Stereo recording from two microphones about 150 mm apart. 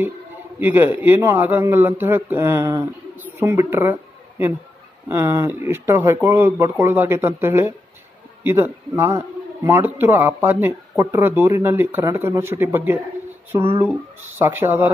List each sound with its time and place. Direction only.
0.6 s speech: 10° right (ahead or behind)